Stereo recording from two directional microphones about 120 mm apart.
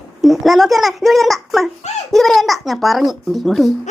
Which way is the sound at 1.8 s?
70° left (ahead or behind).